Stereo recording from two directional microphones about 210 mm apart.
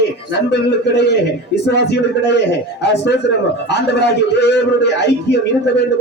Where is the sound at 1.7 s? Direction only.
55° left (ahead or behind).